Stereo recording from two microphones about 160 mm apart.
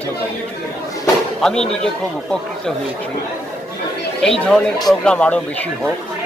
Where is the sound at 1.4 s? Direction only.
5° left (ahead or behind).